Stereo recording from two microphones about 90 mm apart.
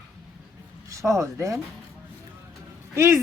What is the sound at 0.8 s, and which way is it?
Speech, 35° right (ahead or behind).